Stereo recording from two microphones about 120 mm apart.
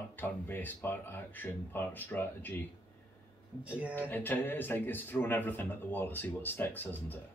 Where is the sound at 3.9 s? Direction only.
15° left (ahead or behind).